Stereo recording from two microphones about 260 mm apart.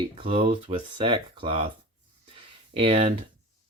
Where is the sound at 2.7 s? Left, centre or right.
Right.